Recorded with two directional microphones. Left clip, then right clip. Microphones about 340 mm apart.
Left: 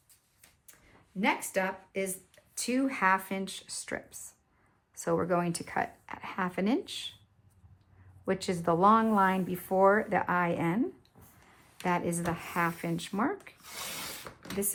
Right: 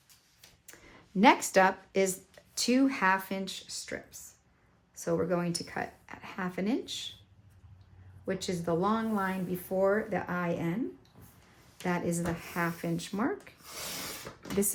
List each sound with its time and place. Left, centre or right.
0.7 s a sound: right
1.2 s speech: centre
8.2 s speech: centre
11.8 s speech: centre